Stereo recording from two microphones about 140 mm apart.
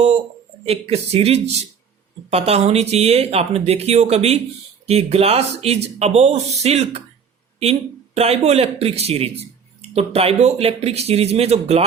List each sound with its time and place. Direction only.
0.6 s speech: 45° right (ahead or behind)